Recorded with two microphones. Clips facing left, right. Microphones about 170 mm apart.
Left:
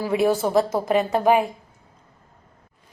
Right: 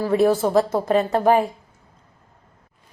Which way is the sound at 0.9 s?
15° left (ahead or behind).